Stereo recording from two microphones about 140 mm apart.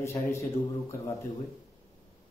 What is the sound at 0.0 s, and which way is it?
Speech, 20° left (ahead or behind).